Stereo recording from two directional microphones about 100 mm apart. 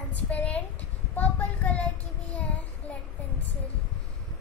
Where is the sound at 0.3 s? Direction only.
15° left (ahead or behind).